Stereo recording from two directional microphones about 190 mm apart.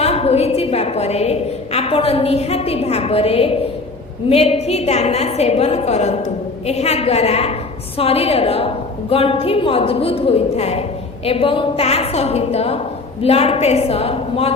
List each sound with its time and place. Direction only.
0.0 s a woman's voice: 30° left (ahead or behind)